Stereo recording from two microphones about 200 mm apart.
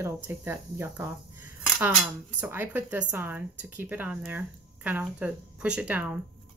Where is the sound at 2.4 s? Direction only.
10° right (ahead or behind).